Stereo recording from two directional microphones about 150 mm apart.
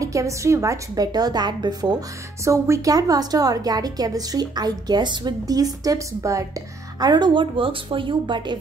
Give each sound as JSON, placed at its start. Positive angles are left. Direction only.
{"t": 0.0, "sound": "a woman's voice", "side_deg": -20}